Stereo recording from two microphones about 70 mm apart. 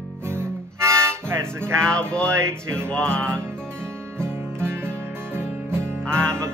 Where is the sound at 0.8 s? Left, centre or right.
Right.